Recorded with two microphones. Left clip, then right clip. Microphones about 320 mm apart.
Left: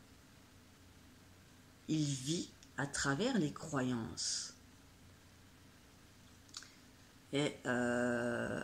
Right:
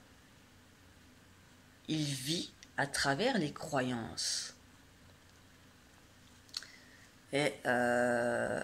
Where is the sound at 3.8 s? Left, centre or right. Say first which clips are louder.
Right 2 dB; right.